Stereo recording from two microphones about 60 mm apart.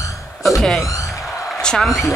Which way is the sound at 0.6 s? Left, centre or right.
Centre.